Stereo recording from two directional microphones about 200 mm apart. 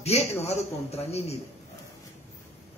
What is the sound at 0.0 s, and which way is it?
A man's voice, 30° left (ahead or behind).